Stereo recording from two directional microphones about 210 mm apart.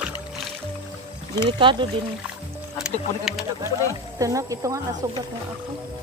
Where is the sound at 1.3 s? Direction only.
25° right (ahead or behind).